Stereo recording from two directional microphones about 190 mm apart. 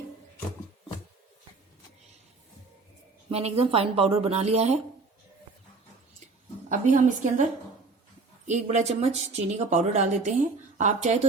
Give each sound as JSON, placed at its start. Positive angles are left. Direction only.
{"t": 3.2, "sound": "speech", "side_deg": -30}
{"t": 6.7, "sound": "speech", "side_deg": -40}
{"t": 8.4, "sound": "speech", "side_deg": -40}